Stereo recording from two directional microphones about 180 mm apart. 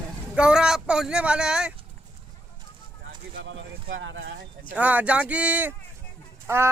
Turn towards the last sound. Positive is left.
turn(degrees=-15)  # may be behind; listen again after turning